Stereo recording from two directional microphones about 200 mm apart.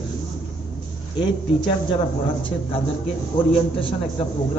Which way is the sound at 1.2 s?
20° left (ahead or behind).